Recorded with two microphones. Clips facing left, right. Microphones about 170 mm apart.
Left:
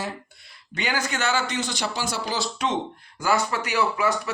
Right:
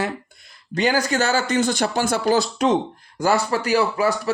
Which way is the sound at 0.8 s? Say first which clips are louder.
Right 7 dB; 35° right (ahead or behind).